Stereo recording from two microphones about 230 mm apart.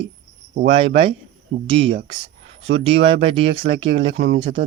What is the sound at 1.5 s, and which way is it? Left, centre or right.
Speech, right.